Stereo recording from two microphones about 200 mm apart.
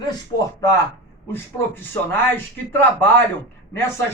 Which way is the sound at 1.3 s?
10° left (ahead or behind).